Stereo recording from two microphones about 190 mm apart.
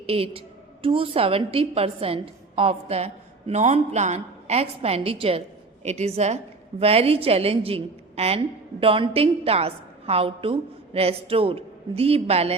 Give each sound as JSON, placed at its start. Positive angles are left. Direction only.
{"t": 0.0, "sound": "a woman's voice", "side_deg": -30}